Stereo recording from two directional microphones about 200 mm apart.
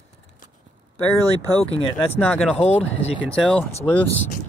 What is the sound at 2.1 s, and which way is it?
Speech, 10° left (ahead or behind).